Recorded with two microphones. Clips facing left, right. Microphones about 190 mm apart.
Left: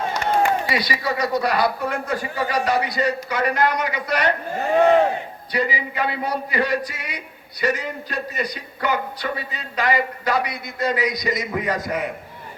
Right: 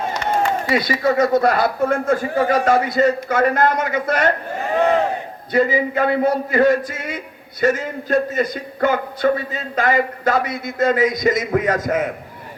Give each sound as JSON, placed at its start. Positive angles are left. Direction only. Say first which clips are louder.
{"t": 0.7, "sound": "a man's voice", "louder": "right 6 dB", "side_deg": -50}
{"t": 5.5, "sound": "a man's voice", "louder": "right 8 dB", "side_deg": -50}